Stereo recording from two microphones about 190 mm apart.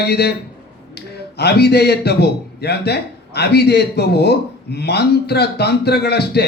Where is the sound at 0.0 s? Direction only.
60° left (ahead or behind).